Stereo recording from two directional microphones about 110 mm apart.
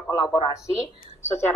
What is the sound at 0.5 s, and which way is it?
Speech, 30° left (ahead or behind).